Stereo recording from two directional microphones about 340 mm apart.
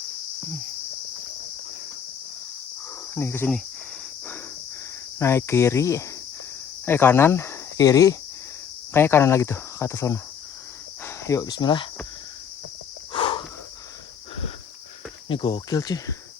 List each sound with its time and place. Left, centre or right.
3.2 s speech: centre
5.2 s speech: centre
6.8 s cricket: centre
8.9 s speech: centre
13.1 s a sound: centre
15.3 s speech: centre